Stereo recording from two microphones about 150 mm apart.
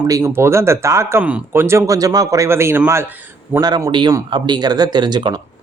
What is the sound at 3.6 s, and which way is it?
Speech, 25° right (ahead or behind).